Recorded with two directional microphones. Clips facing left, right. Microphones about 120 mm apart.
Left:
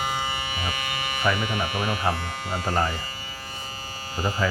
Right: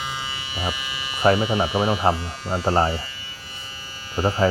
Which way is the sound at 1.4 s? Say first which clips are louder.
Right 6 dB; 55° left (ahead or behind).